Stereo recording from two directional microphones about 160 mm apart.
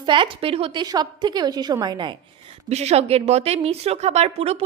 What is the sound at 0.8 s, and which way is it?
A woman's voice, 25° right (ahead or behind).